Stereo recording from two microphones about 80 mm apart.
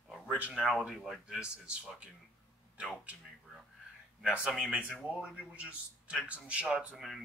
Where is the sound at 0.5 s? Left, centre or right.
Centre.